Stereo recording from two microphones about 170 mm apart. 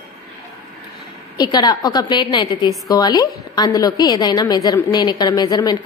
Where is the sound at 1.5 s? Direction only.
25° left (ahead or behind).